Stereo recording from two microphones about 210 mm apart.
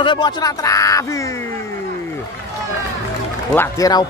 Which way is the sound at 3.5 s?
15° left (ahead or behind).